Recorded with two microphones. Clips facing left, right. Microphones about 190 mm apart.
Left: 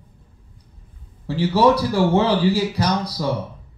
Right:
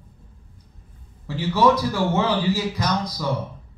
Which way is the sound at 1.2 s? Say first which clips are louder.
Left 3 dB; 35° left (ahead or behind).